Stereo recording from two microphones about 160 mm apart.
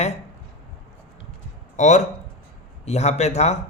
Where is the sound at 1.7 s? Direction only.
45° left (ahead or behind).